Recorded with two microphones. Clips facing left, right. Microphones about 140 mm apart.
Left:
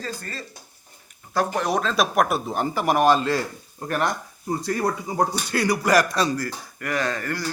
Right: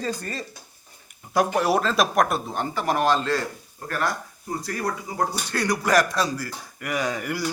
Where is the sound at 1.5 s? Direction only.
5° right (ahead or behind); by 5.3 s 25° left (ahead or behind).